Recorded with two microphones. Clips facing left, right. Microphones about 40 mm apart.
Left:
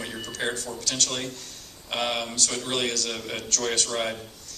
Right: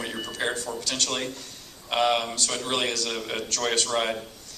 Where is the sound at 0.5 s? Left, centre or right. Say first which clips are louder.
Right 1 dB; right; by 2.7 s centre.